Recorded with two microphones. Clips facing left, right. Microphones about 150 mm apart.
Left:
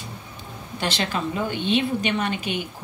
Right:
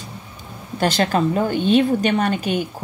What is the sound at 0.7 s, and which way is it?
A woman's voice, 45° right (ahead or behind).